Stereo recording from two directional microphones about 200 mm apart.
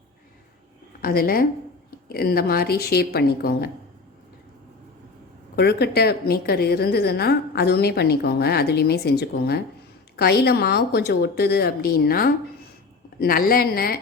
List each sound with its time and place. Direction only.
1.0 s a woman's voice: 45° left (ahead or behind)
5.5 s a woman's voice: 55° left (ahead or behind)